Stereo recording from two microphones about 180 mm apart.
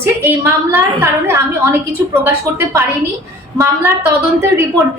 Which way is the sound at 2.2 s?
15° right (ahead or behind).